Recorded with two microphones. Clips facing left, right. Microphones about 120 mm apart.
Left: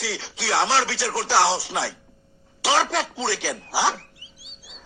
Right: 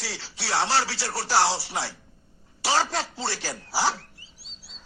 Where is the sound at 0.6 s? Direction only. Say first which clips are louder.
Left 3 dB; 90° left.